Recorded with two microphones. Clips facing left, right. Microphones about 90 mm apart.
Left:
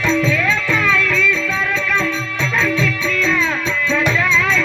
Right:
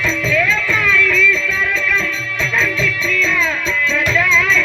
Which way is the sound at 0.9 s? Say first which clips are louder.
Right 3 dB; 30° left (ahead or behind).